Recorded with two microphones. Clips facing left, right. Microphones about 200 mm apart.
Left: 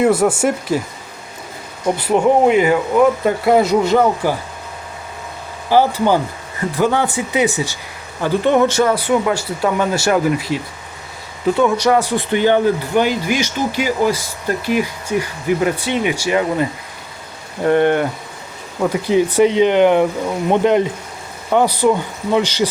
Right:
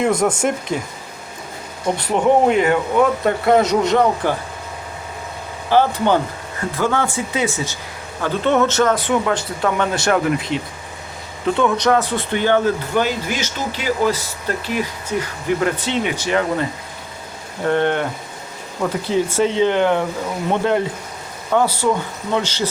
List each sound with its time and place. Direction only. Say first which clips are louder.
0.0 s speech: left 3 dB; 5° left (ahead or behind)
2.0 s speech: left 2 dB; 5° left (ahead or behind)
5.7 s speech: left 2 dB; 5° left (ahead or behind)
17.7 s speech: left 4 dB; 10° left (ahead or behind)